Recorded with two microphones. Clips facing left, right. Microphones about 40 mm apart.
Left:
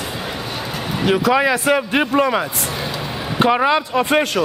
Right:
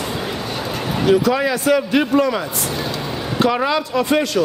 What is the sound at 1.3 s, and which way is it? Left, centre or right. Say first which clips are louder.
A man's voice: left 1 dB; left.